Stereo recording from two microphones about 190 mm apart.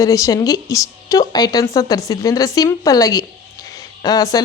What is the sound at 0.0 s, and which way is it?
Speech, 15° left (ahead or behind).